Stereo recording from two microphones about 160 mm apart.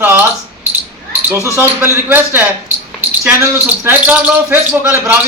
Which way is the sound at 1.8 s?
10° right (ahead or behind).